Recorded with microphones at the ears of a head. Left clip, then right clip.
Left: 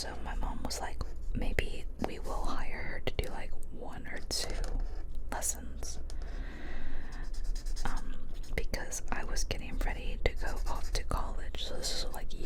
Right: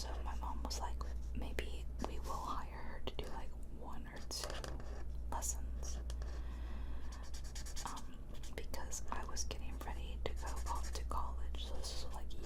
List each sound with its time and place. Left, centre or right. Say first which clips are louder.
0.0 s whispering: left 6 dB; left
8.5 s whispering: left 10 dB; left